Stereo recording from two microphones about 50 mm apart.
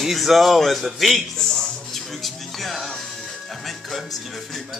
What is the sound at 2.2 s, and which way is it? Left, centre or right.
Music, centre.